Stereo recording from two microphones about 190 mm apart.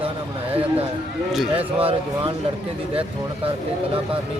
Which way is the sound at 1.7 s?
30° right (ahead or behind).